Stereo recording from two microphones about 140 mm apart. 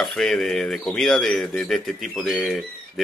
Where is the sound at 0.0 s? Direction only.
5° left (ahead or behind).